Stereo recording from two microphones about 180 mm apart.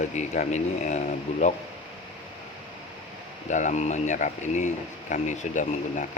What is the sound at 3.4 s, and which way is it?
Speech, 45° left (ahead or behind).